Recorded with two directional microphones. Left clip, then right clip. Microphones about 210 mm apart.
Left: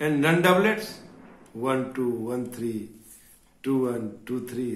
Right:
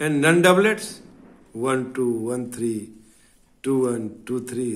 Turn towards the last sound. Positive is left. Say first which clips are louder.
# right 4 dB
turn(degrees=-45)  # may be behind; listen again after turning